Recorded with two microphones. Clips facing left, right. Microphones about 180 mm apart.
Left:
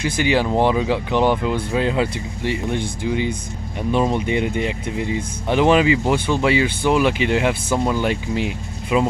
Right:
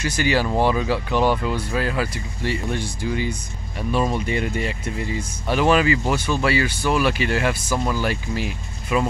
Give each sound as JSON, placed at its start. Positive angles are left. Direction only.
{"t": 0.2, "sound": "speech", "side_deg": 20}